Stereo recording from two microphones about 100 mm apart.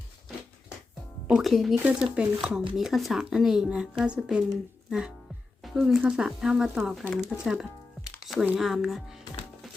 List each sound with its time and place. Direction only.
1.3 s speech: centre (ahead or behind)
1.7 s speech: 15° right (ahead or behind)